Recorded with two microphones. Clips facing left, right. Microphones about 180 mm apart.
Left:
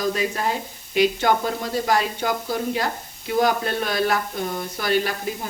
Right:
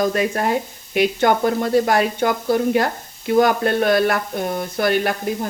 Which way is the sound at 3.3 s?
55° right (ahead or behind).